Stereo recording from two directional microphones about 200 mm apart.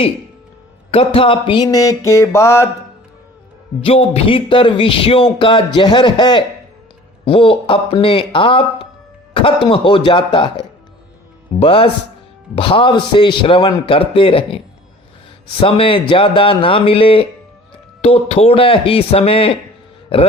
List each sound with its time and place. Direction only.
0.9 s speech: 30° left (ahead or behind)
2.0 s mantra: 15° left (ahead or behind)
3.8 s speech: 30° left (ahead or behind)
15.6 s speech: 25° left (ahead or behind)